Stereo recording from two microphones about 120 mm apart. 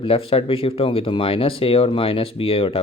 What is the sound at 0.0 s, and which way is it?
Speech, 50° left (ahead or behind).